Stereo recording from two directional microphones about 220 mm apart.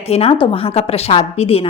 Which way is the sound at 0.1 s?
25° left (ahead or behind).